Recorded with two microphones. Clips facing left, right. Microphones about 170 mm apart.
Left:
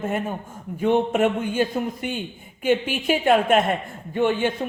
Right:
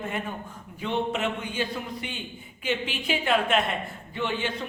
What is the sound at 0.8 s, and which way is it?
Speech, 50° left (ahead or behind).